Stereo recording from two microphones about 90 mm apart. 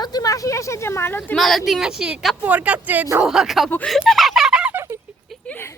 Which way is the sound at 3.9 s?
Centre (ahead or behind).